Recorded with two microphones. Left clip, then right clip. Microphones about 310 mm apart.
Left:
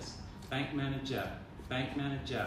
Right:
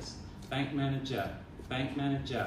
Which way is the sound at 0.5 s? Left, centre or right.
Centre.